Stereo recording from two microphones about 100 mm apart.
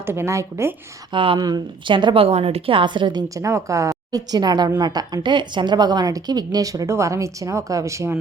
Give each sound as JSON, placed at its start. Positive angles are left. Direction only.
{"t": 0.0, "sound": "speech", "side_deg": -25}
{"t": 1.1, "sound": "speech", "side_deg": -60}
{"t": 1.4, "sound": "speech", "side_deg": -40}
{"t": 2.2, "sound": "a woman's voice", "side_deg": -85}